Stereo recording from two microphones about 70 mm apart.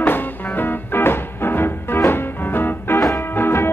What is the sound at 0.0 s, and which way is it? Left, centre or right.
Music, left.